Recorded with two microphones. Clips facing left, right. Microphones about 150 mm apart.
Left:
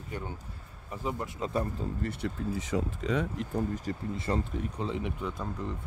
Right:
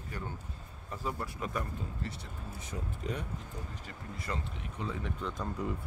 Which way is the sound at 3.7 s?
40° left (ahead or behind).